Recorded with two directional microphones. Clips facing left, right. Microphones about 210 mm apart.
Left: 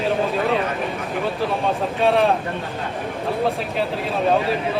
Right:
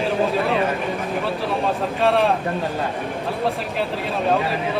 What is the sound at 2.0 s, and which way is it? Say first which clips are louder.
Speech: left 1 dB; centre (ahead or behind).